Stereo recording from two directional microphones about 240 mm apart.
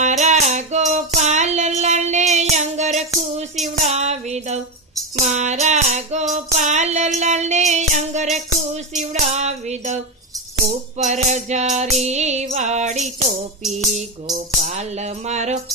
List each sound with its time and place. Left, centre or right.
0.0 s music: right
0.9 s child singing: right
3.8 s music: right
14.3 s music: right